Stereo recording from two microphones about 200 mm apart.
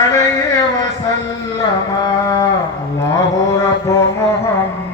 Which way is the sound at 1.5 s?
15° left (ahead or behind).